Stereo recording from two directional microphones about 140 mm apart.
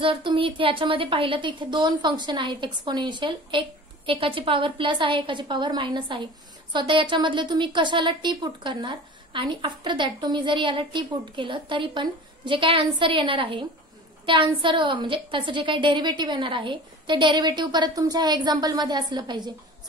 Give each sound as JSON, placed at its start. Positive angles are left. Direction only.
{"t": 0.0, "sound": "a woman's voice", "side_deg": -40}